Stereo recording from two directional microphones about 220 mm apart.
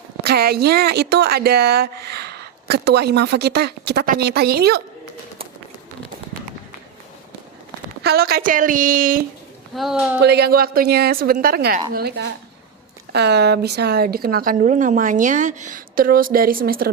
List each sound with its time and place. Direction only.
0.3 s speech: 45° right (ahead or behind)
8.0 s a woman's voice: 45° right (ahead or behind)
9.7 s speech: centre (ahead or behind)
10.2 s a woman's voice: 50° right (ahead or behind)